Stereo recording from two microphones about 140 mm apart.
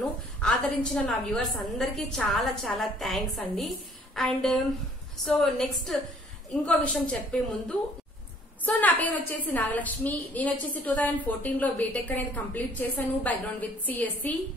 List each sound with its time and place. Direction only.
0.4 s a woman's voice: 5° left (ahead or behind)
8.6 s a woman's voice: 10° left (ahead or behind)